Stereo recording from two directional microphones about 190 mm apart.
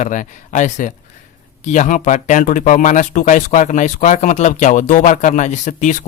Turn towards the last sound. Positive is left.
turn(degrees=40)  # may be behind; listen again after turning